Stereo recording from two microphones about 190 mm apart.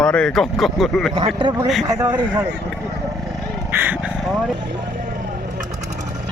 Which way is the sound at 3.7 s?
10° right (ahead or behind).